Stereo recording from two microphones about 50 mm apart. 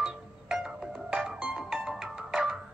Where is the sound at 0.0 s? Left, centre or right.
Centre.